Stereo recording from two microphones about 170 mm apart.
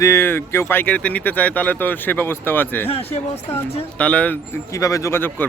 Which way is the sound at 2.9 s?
35° left (ahead or behind).